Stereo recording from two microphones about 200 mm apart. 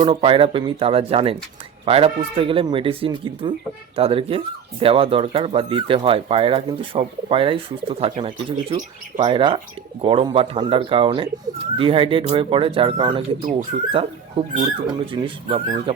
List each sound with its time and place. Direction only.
0.0 s speech: 25° right (ahead or behind)